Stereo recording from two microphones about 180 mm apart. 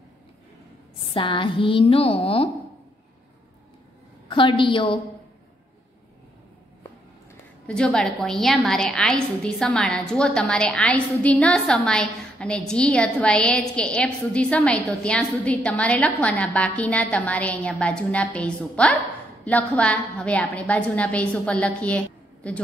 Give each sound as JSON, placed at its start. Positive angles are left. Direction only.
{"t": 1.1, "sound": "a woman's voice", "side_deg": 25}
{"t": 4.3, "sound": "a woman's voice", "side_deg": 25}
{"t": 7.6, "sound": "a woman's voice", "side_deg": 5}